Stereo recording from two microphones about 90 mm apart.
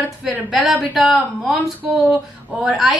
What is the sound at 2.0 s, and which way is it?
Speech, 15° right (ahead or behind).